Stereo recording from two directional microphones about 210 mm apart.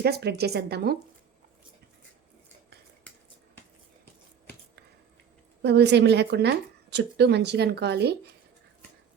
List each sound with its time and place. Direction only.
0.0 s a woman's voice: 50° right (ahead or behind)
5.6 s a woman's voice: 55° right (ahead or behind)